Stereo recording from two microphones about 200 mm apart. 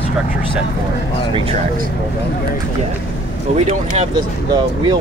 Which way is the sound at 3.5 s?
35° right (ahead or behind).